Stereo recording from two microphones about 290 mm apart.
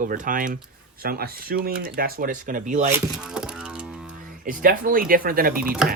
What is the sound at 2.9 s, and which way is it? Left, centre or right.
Music, centre.